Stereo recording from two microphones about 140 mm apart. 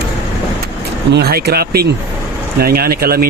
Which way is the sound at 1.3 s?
90° right.